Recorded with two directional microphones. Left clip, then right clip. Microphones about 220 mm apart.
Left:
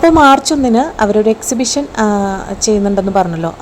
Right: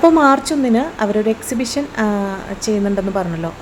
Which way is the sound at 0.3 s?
15° left (ahead or behind).